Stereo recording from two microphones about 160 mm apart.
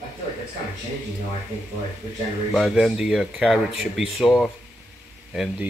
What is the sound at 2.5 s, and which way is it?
Speech, centre (ahead or behind).